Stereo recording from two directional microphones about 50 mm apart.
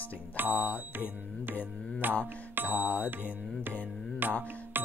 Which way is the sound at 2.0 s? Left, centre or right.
Right.